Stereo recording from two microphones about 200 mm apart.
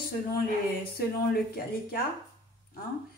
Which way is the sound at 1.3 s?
50° left (ahead or behind).